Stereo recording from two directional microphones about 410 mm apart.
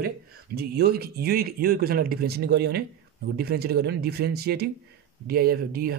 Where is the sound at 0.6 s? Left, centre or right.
Right.